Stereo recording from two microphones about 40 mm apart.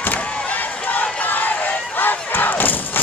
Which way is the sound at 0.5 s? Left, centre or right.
Left.